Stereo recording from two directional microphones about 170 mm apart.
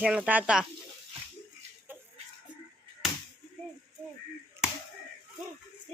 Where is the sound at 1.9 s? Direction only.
10° right (ahead or behind).